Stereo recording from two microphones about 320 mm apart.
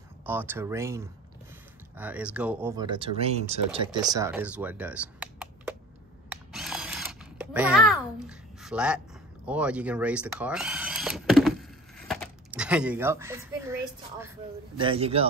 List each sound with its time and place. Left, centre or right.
0.2 s speech: centre
6.5 s drill: centre
9.5 s speech: centre